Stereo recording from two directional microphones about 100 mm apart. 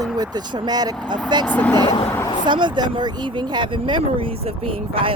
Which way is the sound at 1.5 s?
15° left (ahead or behind).